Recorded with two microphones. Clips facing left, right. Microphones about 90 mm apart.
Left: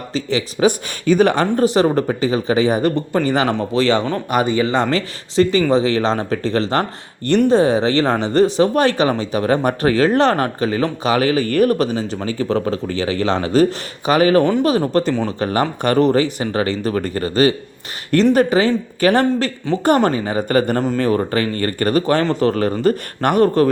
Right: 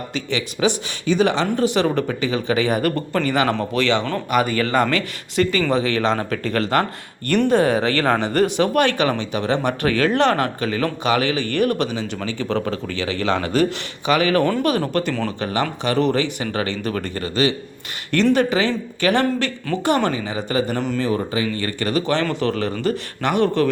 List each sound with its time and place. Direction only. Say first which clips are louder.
0.1 s speech: left 7 dB; 35° left (ahead or behind)
2.9 s speech: left 3 dB; 15° left (ahead or behind)
3.8 s speech: left 5 dB; 35° left (ahead or behind)
4.5 s speech: left 2 dB; 20° left (ahead or behind); by 23.6 s 40° left (ahead or behind)